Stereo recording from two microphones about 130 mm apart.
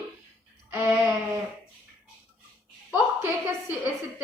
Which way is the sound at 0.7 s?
10° right (ahead or behind).